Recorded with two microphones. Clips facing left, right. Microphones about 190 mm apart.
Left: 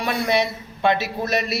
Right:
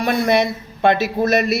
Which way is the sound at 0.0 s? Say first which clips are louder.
Right 5 dB; 50° right (ahead or behind).